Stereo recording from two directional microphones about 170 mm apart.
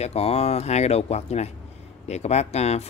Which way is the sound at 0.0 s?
35° left (ahead or behind).